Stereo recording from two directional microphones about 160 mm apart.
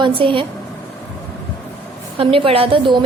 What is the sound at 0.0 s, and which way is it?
Speech, 30° right (ahead or behind).